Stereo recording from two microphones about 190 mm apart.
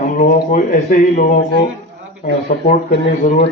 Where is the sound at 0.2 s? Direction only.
45° left (ahead or behind).